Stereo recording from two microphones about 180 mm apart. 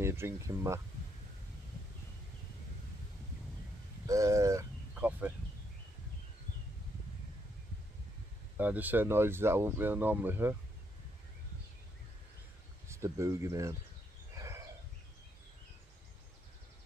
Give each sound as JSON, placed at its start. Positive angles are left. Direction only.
{"t": 0.0, "sound": "speech", "side_deg": -15}
{"t": 4.0, "sound": "speech", "side_deg": -20}
{"t": 4.9, "sound": "a sound", "side_deg": -10}
{"t": 8.5, "sound": "speech", "side_deg": -10}
{"t": 12.8, "sound": "speech", "side_deg": -15}
{"t": 14.3, "sound": "a sound", "side_deg": -15}